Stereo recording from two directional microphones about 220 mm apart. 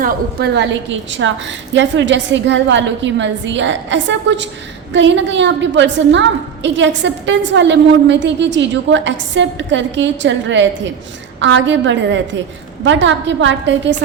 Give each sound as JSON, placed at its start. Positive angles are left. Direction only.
{"t": 0.0, "sound": "a woman's voice", "side_deg": -45}